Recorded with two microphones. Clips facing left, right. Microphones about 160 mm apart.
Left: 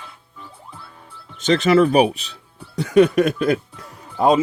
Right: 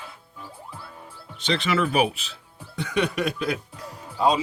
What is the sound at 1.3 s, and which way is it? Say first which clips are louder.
Speech: left 9 dB; 45° left (ahead or behind).